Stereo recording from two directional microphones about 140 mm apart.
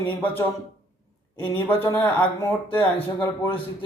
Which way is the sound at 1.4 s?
15° left (ahead or behind).